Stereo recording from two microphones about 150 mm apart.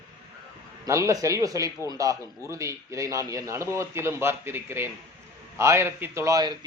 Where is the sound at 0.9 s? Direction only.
20° right (ahead or behind).